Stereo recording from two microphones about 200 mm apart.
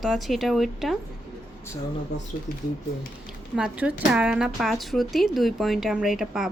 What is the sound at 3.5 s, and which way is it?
A woman's voice, 5° right (ahead or behind).